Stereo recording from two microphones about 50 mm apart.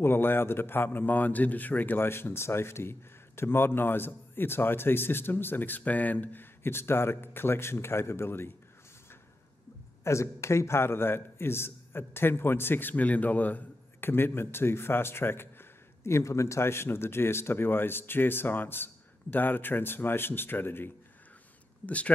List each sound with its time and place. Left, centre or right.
0.0 s a man's voice: left
2.0 s a man's voice: left
10.0 s a man's voice: left
12.9 s speech: left
14.0 s a man's voice: left
21.8 s speech: left